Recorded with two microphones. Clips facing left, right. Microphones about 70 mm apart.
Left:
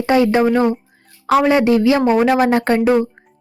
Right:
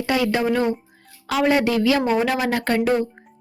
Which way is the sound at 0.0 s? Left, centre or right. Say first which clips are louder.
Left 7 dB; left.